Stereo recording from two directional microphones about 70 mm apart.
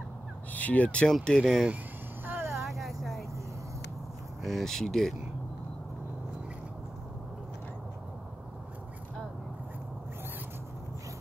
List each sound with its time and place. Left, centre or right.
0.5 s speech: left
2.2 s vehicle: right
2.6 s vehicle: centre
4.4 s speech: centre